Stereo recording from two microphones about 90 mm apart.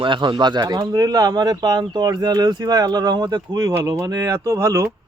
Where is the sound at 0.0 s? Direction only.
65° right (ahead or behind).